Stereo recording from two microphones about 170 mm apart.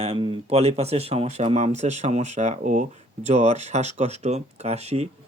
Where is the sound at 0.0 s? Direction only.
35° right (ahead or behind).